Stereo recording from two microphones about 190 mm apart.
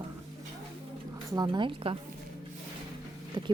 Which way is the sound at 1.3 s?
20° right (ahead or behind).